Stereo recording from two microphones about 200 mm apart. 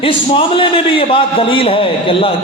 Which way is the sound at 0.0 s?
25° left (ahead or behind).